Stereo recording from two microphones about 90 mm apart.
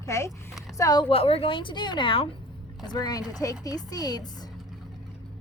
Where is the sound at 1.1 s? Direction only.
85° left.